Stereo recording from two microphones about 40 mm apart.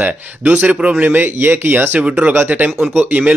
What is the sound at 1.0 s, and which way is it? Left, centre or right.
Speech, right.